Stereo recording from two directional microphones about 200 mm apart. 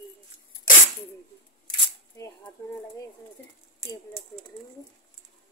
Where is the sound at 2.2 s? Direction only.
15° left (ahead or behind).